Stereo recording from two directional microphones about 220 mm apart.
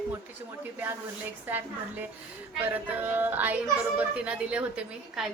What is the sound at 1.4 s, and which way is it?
A woman's voice, 10° right (ahead or behind).